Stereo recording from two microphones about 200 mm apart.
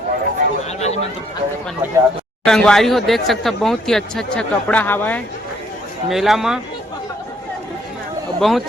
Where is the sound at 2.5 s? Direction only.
Centre (ahead or behind).